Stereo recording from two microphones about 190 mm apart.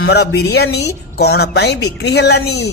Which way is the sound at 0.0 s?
65° left (ahead or behind).